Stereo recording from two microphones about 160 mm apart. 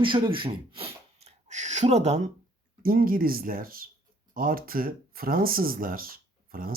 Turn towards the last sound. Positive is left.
turn(degrees=-65)  # may be behind; listen again after turning